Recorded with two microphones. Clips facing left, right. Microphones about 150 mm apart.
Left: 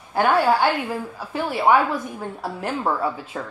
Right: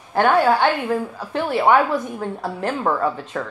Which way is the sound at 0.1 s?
5° left (ahead or behind).